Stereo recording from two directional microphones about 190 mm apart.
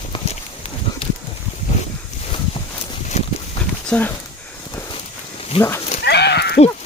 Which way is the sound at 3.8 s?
5° left (ahead or behind).